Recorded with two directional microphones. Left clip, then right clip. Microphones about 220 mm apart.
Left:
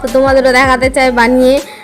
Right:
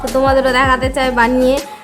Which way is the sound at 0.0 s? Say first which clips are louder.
Left 5 dB; centre (ahead or behind).